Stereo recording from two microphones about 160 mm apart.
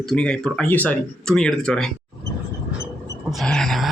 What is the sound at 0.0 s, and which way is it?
Speech, 5° left (ahead or behind).